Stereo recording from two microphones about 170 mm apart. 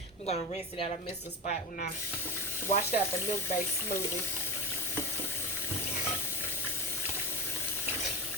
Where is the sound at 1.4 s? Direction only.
50° left (ahead or behind).